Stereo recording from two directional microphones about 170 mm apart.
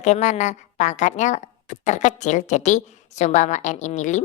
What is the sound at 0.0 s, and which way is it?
A woman's voice, 45° left (ahead or behind).